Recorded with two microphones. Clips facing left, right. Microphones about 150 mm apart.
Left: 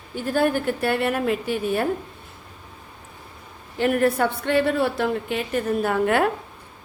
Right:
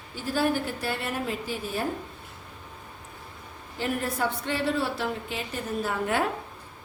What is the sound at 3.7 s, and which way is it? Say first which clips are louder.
A woman's voice: left 9 dB; 65° left (ahead or behind).